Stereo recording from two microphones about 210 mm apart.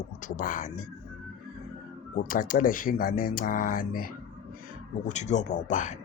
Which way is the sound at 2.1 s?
40° left (ahead or behind).